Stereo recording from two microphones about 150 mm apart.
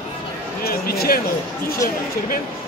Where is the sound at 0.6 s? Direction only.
90° left.